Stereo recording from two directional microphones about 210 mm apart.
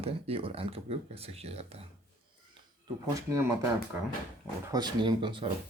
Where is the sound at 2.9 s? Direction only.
20° right (ahead or behind).